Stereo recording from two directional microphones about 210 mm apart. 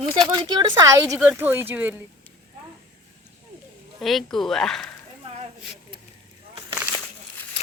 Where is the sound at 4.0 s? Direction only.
Centre (ahead or behind).